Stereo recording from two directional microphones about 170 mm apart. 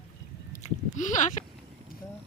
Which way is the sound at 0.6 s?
45° left (ahead or behind).